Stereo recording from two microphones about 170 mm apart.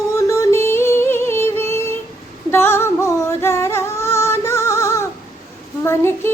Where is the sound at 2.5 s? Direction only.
15° left (ahead or behind).